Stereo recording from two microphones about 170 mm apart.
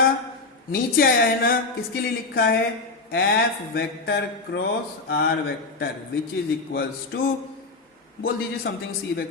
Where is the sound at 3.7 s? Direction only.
70° left (ahead or behind).